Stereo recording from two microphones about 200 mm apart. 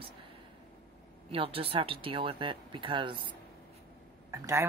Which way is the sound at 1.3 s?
25° right (ahead or behind).